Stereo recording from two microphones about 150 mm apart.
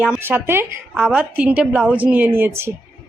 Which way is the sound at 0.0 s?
10° right (ahead or behind).